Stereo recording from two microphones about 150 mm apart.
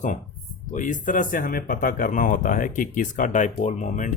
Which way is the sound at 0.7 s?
60° left (ahead or behind).